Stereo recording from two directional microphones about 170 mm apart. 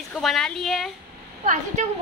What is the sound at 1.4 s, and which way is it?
Speech, 45° right (ahead or behind).